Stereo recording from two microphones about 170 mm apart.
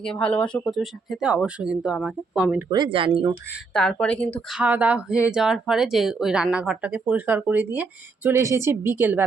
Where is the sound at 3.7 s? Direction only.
5° left (ahead or behind).